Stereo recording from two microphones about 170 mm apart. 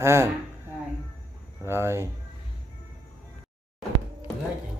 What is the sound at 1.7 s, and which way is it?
Speech, 15° right (ahead or behind).